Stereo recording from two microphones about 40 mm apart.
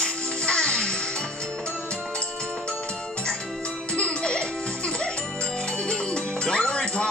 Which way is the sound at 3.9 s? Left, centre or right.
Left.